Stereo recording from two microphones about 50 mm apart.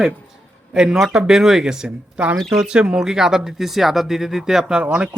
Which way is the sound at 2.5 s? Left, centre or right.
Centre.